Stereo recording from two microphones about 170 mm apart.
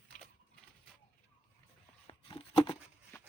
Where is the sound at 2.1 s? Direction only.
30° left (ahead or behind).